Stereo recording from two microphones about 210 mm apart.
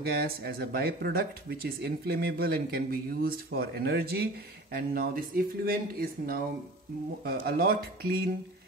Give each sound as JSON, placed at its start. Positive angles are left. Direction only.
{"t": 0.0, "sound": "speech", "side_deg": -50}